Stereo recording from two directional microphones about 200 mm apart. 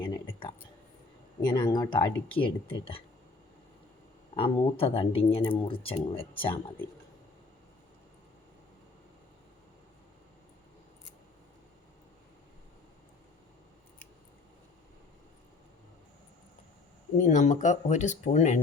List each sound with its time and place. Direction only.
0.0 s a sound: 25° left (ahead or behind)
1.5 s speech: 20° left (ahead or behind)
4.4 s speech: 25° left (ahead or behind)
17.2 s speech: 35° left (ahead or behind)